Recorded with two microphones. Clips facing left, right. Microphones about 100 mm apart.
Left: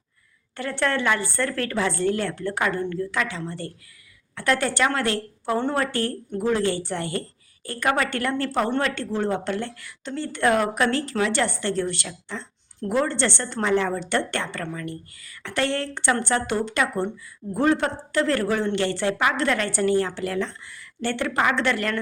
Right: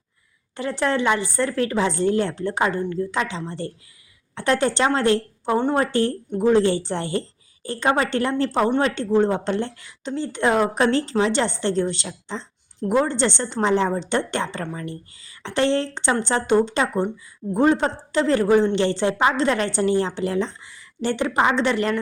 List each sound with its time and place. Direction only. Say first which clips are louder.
0.5 s a woman's voice: right 2 dB; 20° right (ahead or behind)